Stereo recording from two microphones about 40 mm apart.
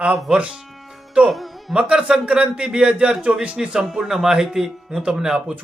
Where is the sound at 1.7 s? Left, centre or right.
Right.